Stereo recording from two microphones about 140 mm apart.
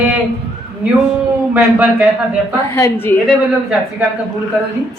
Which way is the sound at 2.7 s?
15° left (ahead or behind).